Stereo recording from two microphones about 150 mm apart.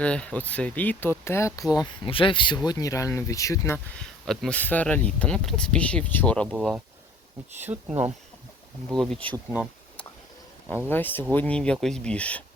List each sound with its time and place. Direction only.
0.0 s speech: 5° left (ahead or behind)
2.0 s speech: 35° left (ahead or behind); by 3.8 s 20° left (ahead or behind)
3.9 s speech: 5° left (ahead or behind)
7.6 s speech: 10° right (ahead or behind)
8.9 s speech: 5° left (ahead or behind)
10.8 s speech: 15° left (ahead or behind)